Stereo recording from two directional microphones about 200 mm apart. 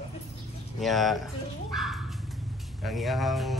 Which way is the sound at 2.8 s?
Centre (ahead or behind).